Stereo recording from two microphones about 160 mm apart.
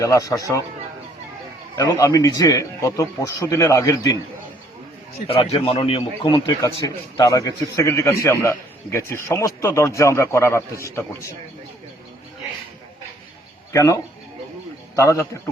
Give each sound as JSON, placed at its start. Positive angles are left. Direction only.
{"t": 0.0, "sound": "a man's voice", "side_deg": 20}
{"t": 1.7, "sound": "a man's voice", "side_deg": 20}
{"t": 5.3, "sound": "a man's voice", "side_deg": 35}
{"t": 6.3, "sound": "a man's voice", "side_deg": 20}
{"t": 13.7, "sound": "a man's voice", "side_deg": 20}